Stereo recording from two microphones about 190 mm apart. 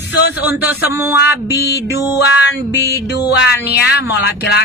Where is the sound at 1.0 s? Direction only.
15° right (ahead or behind).